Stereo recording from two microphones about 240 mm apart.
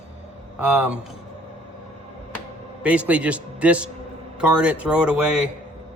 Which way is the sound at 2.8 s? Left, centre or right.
Centre.